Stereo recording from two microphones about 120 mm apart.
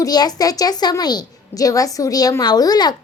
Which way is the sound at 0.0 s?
35° left (ahead or behind).